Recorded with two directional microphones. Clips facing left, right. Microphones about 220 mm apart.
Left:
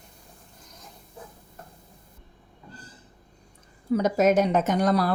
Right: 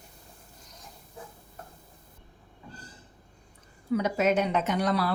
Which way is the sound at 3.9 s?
40° left (ahead or behind).